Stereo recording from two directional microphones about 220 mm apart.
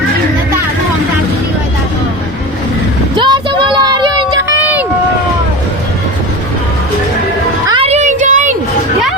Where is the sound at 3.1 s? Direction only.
20° right (ahead or behind).